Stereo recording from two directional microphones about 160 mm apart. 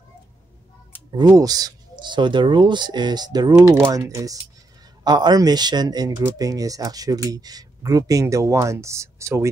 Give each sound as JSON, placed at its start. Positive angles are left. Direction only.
{"t": 1.1, "sound": "speech", "side_deg": -25}